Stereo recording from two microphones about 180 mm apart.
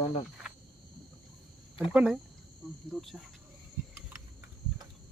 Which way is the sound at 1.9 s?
5° right (ahead or behind).